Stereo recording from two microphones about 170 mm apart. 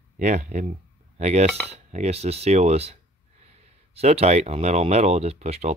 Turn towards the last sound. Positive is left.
turn(degrees=-40)  # may be behind; listen again after turning